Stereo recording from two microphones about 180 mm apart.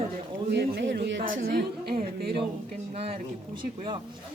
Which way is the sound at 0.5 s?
65° right (ahead or behind).